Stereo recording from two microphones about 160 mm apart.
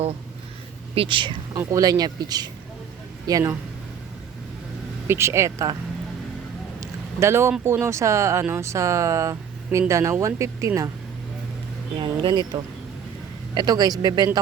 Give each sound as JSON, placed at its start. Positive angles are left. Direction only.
{"t": 0.9, "sound": "speech", "side_deg": -30}
{"t": 5.0, "sound": "speech", "side_deg": -15}
{"t": 6.7, "sound": "a sound", "side_deg": -15}
{"t": 7.6, "sound": "speech", "side_deg": -15}
{"t": 11.9, "sound": "speech", "side_deg": -30}
{"t": 13.5, "sound": "speech", "side_deg": -25}